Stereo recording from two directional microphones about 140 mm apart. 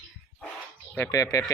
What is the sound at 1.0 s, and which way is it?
Speech, 25° left (ahead or behind).